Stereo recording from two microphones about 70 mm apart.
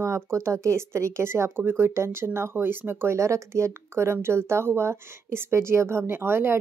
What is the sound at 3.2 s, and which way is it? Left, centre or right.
A woman's voice, right.